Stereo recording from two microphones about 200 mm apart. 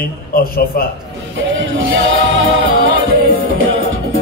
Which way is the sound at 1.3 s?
65° right (ahead or behind).